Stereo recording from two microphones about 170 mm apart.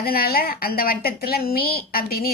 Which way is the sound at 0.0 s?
65° left (ahead or behind).